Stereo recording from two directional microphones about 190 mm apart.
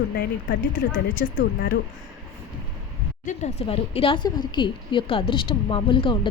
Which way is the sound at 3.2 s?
35° left (ahead or behind).